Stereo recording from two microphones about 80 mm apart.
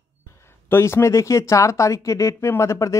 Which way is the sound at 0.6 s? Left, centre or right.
Left.